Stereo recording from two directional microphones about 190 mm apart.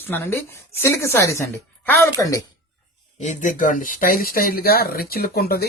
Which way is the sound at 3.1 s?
40° left (ahead or behind).